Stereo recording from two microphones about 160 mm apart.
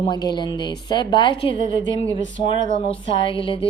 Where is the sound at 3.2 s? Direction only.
35° left (ahead or behind).